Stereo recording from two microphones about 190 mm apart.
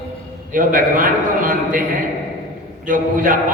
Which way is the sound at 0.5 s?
45° right (ahead or behind).